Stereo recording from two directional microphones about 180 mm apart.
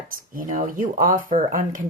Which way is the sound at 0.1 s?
50° right (ahead or behind).